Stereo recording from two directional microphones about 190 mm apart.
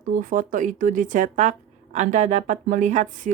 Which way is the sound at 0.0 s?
45° right (ahead or behind).